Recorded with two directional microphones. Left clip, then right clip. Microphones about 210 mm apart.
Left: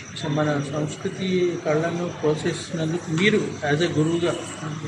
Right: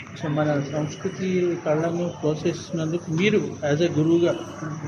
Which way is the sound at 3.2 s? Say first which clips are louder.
Left 1 dB; 50° right (ahead or behind).